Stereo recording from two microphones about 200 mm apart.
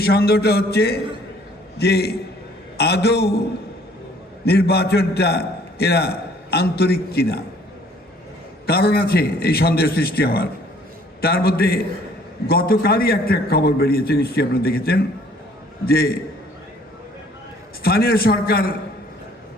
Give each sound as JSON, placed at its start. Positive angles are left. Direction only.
{"t": 0.0, "sound": "a man's voice", "side_deg": 50}
{"t": 4.4, "sound": "a man's voice", "side_deg": 50}
{"t": 8.6, "sound": "a man's voice", "side_deg": 50}
{"t": 17.8, "sound": "a man's voice", "side_deg": 50}